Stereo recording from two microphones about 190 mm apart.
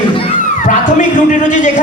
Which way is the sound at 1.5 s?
40° left (ahead or behind).